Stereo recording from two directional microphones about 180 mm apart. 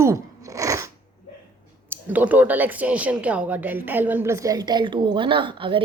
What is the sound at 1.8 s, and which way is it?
Speech, 10° right (ahead or behind).